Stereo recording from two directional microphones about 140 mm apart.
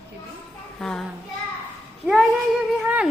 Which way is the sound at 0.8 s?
5° left (ahead or behind).